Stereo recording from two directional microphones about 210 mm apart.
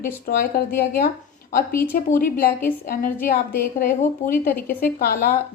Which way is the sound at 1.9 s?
40° left (ahead or behind).